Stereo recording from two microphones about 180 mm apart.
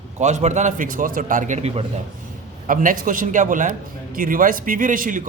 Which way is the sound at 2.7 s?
45° right (ahead or behind).